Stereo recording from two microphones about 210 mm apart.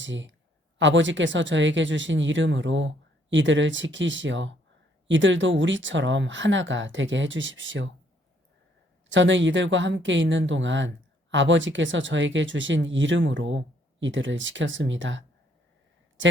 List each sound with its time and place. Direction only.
0.0 s speech: 60° right (ahead or behind)
9.0 s speech: 60° right (ahead or behind)